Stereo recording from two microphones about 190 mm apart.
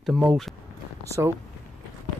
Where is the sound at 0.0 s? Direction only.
Centre (ahead or behind).